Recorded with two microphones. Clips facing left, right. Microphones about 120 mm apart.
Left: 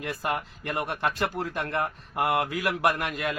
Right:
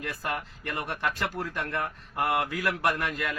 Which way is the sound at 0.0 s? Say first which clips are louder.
Left 3 dB; 20° left (ahead or behind).